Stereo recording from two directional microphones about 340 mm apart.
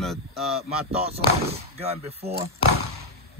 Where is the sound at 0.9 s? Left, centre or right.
Centre.